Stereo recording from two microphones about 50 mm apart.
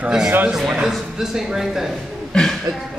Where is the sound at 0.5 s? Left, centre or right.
Centre.